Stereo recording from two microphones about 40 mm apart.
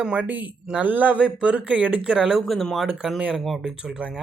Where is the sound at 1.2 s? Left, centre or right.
Right.